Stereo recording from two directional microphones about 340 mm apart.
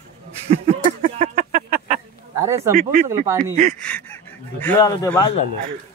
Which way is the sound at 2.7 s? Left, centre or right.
Right.